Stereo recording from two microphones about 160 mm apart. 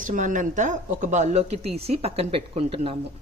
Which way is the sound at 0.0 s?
55° right (ahead or behind).